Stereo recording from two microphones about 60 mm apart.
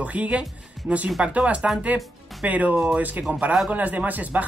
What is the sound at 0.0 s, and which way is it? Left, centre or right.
Speech, right.